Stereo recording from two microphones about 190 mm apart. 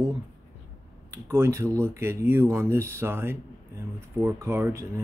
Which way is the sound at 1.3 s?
15° right (ahead or behind).